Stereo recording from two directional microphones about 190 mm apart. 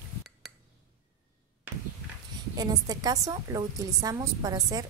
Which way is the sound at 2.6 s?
20° right (ahead or behind).